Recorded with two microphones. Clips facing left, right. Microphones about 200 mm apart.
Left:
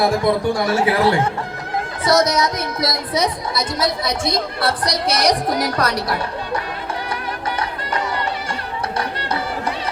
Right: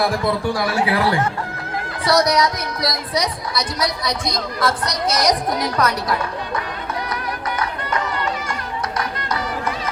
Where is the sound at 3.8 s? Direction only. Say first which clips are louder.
Left 4 dB; 25° left (ahead or behind).